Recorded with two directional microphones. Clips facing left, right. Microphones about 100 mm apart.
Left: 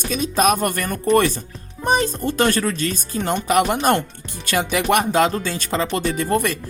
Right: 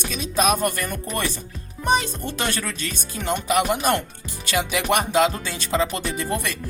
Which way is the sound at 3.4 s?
55° left (ahead or behind).